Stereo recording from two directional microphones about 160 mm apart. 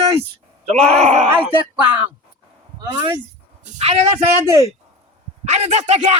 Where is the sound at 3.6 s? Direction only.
40° right (ahead or behind).